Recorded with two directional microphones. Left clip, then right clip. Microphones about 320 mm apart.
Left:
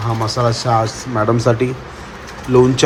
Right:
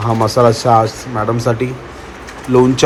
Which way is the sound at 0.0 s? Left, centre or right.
Centre.